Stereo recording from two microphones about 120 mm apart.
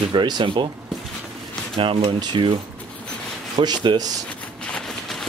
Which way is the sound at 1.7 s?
50° right (ahead or behind).